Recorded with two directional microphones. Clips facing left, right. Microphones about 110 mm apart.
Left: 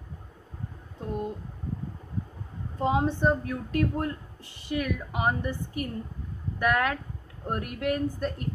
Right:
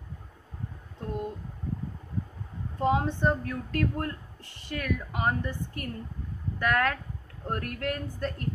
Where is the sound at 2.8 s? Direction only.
20° left (ahead or behind).